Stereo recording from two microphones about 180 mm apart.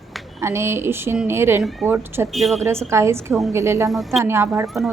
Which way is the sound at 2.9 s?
15° right (ahead or behind).